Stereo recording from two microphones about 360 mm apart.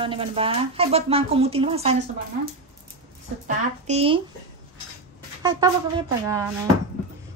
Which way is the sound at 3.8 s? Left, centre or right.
Centre.